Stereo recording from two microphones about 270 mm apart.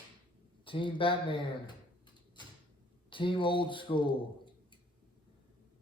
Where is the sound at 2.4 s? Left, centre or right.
Centre.